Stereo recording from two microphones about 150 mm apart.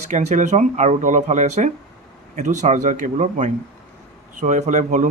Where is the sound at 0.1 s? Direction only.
50° right (ahead or behind).